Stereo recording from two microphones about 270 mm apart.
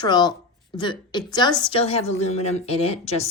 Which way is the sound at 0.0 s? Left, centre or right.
Centre.